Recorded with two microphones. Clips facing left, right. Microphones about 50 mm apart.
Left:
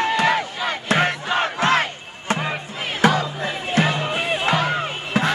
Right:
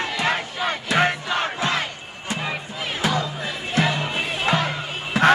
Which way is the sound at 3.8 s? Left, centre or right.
Left.